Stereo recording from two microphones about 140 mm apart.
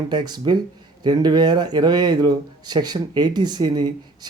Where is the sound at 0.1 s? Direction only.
30° right (ahead or behind).